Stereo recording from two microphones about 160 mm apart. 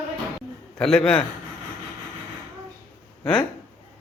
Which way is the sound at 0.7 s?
5° left (ahead or behind).